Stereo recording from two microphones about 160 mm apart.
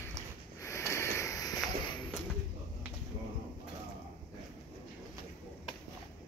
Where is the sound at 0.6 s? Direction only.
20° left (ahead or behind).